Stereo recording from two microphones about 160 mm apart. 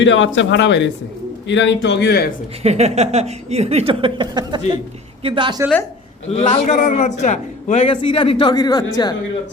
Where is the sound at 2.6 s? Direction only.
40° right (ahead or behind).